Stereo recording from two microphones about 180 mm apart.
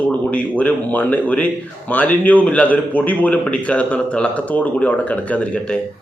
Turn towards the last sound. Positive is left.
turn(degrees=5)  # may be behind; listen again after turning